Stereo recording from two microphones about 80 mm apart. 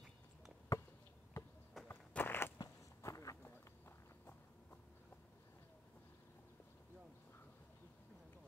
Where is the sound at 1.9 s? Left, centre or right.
Left.